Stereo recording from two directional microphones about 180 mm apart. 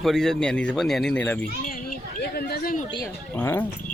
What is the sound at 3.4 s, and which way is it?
Speech, 10° left (ahead or behind).